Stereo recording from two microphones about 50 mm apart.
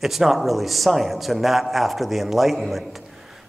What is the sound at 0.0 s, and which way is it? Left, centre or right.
A man's voice, centre.